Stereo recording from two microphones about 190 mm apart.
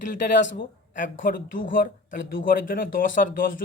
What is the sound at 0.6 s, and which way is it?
Speech, 45° left (ahead or behind).